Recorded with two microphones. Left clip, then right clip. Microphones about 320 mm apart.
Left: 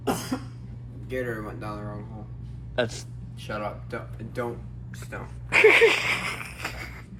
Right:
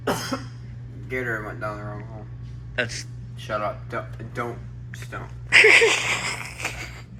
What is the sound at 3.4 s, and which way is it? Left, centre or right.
Speech, centre.